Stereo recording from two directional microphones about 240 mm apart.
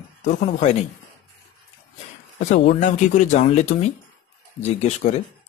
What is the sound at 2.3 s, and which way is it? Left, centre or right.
Speech, left.